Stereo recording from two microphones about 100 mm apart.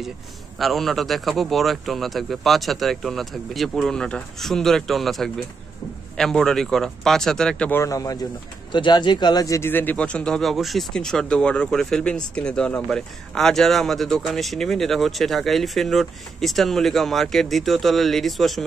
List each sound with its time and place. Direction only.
0.6 s speech: centre (ahead or behind)
7.7 s speech: 35° left (ahead or behind)
8.7 s speech: 50° left (ahead or behind)
9.6 s speech: 20° left (ahead or behind); by 18.6 s centre (ahead or behind)